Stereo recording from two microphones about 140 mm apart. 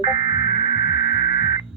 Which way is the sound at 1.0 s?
70° left (ahead or behind).